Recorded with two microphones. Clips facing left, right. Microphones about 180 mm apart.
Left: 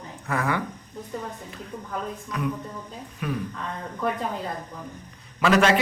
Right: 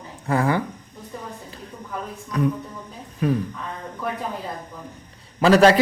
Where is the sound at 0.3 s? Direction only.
30° right (ahead or behind).